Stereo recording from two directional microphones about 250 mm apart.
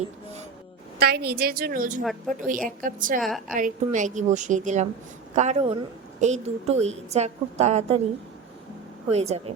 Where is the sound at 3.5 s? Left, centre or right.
Right.